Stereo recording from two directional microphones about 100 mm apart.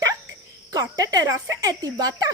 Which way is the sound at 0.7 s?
35° right (ahead or behind).